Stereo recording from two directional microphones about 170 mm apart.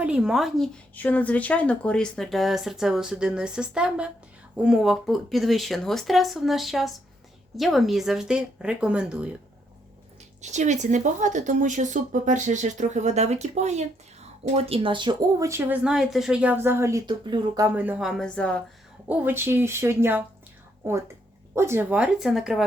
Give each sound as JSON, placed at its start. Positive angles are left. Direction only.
{"t": 0.0, "sound": "speech", "side_deg": -5}
{"t": 0.9, "sound": "speech", "side_deg": 10}
{"t": 10.4, "sound": "speech", "side_deg": -45}
{"t": 15.8, "sound": "speech", "side_deg": -5}
{"t": 17.1, "sound": "speech", "side_deg": -25}
{"t": 17.7, "sound": "speech", "side_deg": -10}
{"t": 19.0, "sound": "speech", "side_deg": -10}
{"t": 21.5, "sound": "speech", "side_deg": -15}